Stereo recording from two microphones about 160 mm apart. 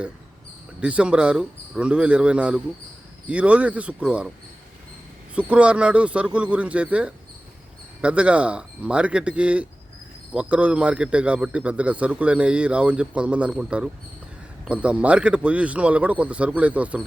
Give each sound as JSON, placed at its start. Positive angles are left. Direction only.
{"t": 0.8, "sound": "a man's voice", "side_deg": -10}
{"t": 5.3, "sound": "a man's voice", "side_deg": -10}